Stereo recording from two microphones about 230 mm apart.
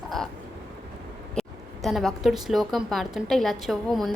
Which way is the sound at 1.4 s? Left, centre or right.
Centre.